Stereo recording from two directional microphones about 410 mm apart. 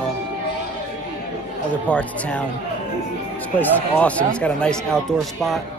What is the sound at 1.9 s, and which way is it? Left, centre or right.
Speech, centre.